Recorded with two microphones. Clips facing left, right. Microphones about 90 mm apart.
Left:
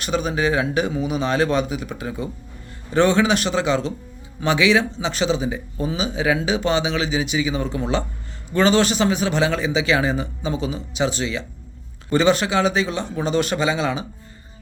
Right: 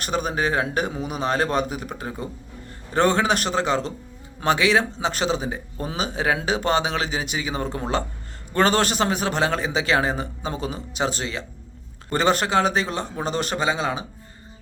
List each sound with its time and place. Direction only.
0.0 s a man's voice: 45° right (ahead or behind)